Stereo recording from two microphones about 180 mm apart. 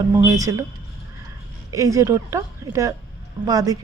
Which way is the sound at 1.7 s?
15° right (ahead or behind).